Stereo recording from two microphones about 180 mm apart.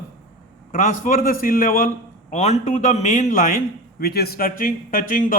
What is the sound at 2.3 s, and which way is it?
A man's voice, 40° left (ahead or behind).